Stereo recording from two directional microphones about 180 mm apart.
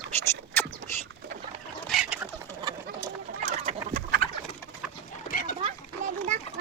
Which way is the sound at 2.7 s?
20° right (ahead or behind).